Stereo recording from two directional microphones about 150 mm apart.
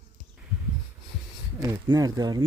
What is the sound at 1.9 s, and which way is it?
Speech, 25° right (ahead or behind).